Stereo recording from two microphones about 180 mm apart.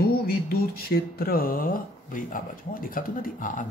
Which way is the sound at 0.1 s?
55° left (ahead or behind).